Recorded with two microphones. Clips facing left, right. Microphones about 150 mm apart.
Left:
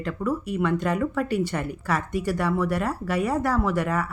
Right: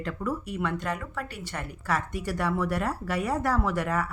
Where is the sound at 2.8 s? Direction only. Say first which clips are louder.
Left 4 dB; 90° left.